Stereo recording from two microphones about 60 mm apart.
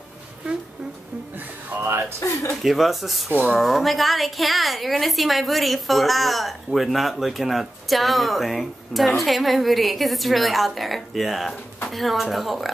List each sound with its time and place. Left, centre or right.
2.1 s speech: left
2.6 s a woman's voice: centre